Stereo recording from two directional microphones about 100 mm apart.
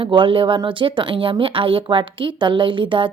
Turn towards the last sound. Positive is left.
turn(degrees=-55)  # may be behind; listen again after turning